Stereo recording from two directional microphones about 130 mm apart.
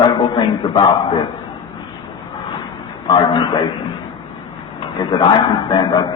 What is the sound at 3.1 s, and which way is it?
Speech, 35° left (ahead or behind).